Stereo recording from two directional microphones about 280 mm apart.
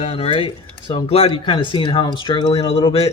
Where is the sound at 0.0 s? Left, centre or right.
Left.